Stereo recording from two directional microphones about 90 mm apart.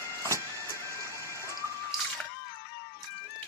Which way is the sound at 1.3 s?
30° left (ahead or behind).